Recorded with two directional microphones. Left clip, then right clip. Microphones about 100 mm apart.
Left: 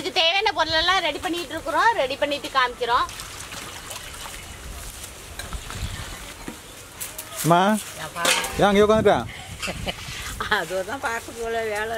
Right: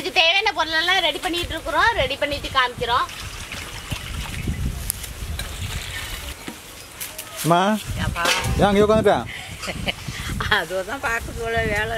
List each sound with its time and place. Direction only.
0.0 s a sound: 15° left (ahead or behind)
1.2 s speech: 5° left (ahead or behind)
2.0 s a woman's voice: 20° left (ahead or behind)
7.4 s speech: 10° left (ahead or behind)
8.3 s speech: 45° left (ahead or behind)
8.5 s speech: 10° left (ahead or behind)
10.4 s speech: centre (ahead or behind)